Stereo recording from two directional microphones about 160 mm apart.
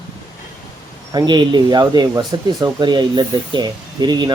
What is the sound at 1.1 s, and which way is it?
Speech, 25° right (ahead or behind).